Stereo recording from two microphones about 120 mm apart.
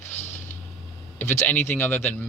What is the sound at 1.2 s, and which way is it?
Speech, 20° left (ahead or behind).